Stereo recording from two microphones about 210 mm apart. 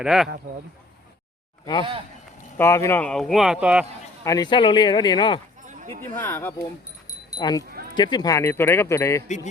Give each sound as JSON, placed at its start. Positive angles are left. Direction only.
{"t": 0.0, "sound": "speech", "side_deg": -5}
{"t": 1.6, "sound": "speech", "side_deg": 20}
{"t": 4.2, "sound": "speech", "side_deg": 15}
{"t": 5.6, "sound": "a sound", "side_deg": -35}
{"t": 6.1, "sound": "speech", "side_deg": 10}